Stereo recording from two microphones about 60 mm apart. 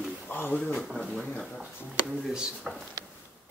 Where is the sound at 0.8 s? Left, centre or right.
Centre.